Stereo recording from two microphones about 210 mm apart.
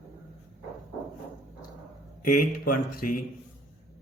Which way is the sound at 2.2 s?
40° left (ahead or behind).